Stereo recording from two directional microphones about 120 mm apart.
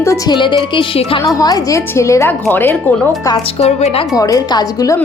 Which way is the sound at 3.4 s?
60° left (ahead or behind).